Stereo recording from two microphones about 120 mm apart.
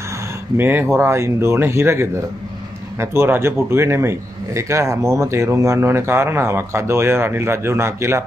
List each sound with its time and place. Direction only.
0.6 s speech: 15° right (ahead or behind)